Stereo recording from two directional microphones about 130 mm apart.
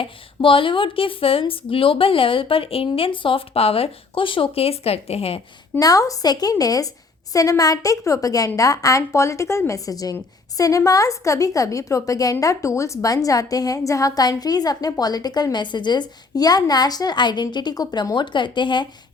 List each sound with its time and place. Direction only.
0.0 s speech: 40° left (ahead or behind)
5.8 s a woman's voice: 25° left (ahead or behind)